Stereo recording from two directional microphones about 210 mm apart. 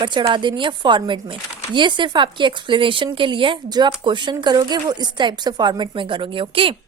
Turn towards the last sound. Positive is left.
turn(degrees=-25)  # may be behind; listen again after turning